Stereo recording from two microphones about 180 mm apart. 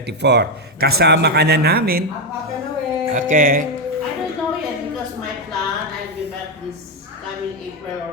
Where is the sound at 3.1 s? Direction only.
50° right (ahead or behind).